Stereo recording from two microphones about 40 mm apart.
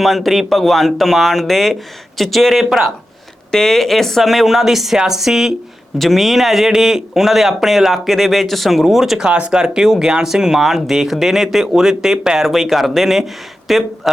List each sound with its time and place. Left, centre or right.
0.0 s speech: centre
3.5 s speech: centre
4.3 s speech: centre
6.0 s speech: centre
9.1 s speech: right
12.4 s speech: centre